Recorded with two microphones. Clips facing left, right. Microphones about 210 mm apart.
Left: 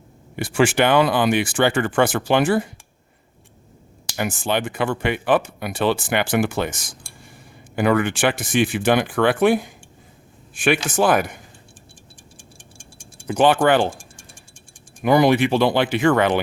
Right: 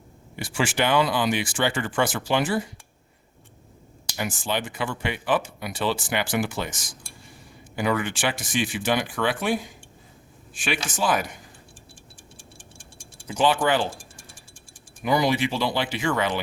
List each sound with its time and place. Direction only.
0.3 s speech: 60° left (ahead or behind)
4.2 s speech: 60° left (ahead or behind)
13.2 s speech: 60° left (ahead or behind)